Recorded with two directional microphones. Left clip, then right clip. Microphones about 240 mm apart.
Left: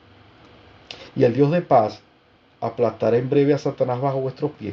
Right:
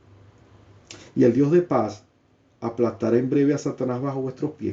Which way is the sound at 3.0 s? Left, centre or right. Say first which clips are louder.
Left 3 dB; left.